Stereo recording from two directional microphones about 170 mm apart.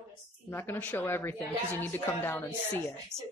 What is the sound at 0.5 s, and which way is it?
A woman's voice, 10° left (ahead or behind).